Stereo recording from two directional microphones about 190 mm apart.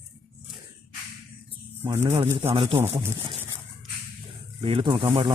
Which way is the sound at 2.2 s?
15° right (ahead or behind).